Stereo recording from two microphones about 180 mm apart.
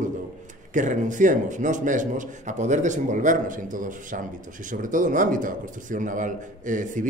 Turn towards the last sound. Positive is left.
turn(degrees=-45)  # may be behind; listen again after turning